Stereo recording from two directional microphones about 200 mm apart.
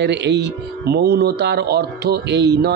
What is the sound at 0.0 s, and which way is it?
A man's voice, 60° right (ahead or behind).